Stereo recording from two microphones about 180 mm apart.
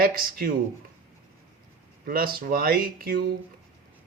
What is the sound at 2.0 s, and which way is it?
Speech, 55° right (ahead or behind).